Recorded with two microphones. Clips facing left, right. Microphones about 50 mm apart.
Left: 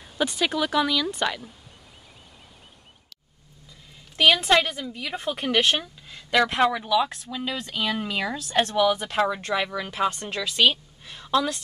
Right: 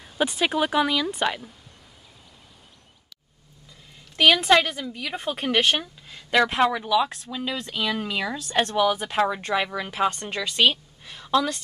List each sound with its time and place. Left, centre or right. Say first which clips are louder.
0.2 s speech: right 2 dB; centre
4.2 s a woman's voice: right 1 dB; centre
7.7 s a woman's voice: even; centre
8.7 s a woman's voice: even; centre